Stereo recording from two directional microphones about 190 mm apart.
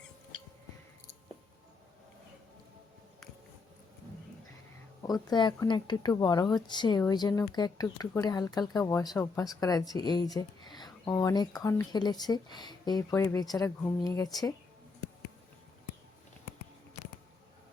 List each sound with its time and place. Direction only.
5.0 s speech: 20° left (ahead or behind)